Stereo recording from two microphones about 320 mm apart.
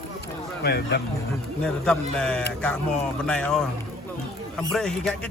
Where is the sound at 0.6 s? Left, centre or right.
Left.